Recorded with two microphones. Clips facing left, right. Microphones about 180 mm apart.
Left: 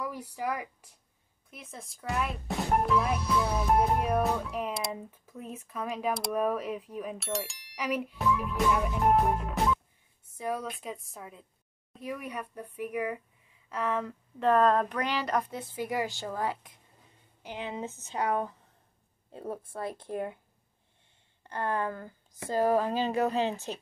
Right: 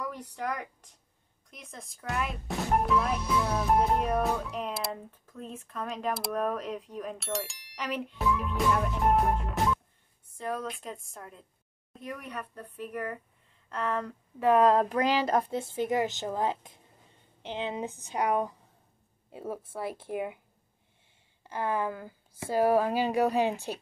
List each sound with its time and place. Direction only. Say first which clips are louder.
0.0 s a woman's voice: left 1 dB; 10° left (ahead or behind)
14.4 s speech: right 2 dB; 15° right (ahead or behind)
19.3 s speech: right 1 dB; 5° right (ahead or behind)
21.5 s speech: right 1 dB; 5° right (ahead or behind)